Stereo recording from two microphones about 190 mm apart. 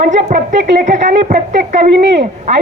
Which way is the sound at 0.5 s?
65° right (ahead or behind).